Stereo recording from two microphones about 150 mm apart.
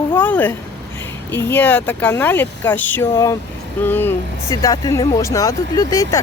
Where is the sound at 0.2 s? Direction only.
10° left (ahead or behind).